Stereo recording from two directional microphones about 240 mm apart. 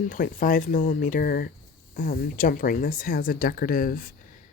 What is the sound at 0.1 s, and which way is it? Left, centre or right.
Speech, left.